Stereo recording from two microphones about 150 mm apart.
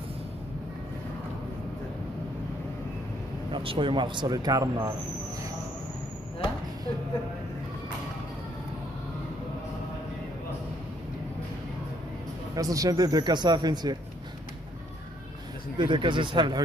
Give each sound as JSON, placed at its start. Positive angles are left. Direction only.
{"t": 3.5, "sound": "speech", "side_deg": -35}
{"t": 12.5, "sound": "speech", "side_deg": -25}
{"t": 15.8, "sound": "speech", "side_deg": -30}